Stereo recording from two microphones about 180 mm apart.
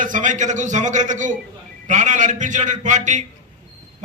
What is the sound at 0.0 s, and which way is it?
A man's voice, 45° right (ahead or behind).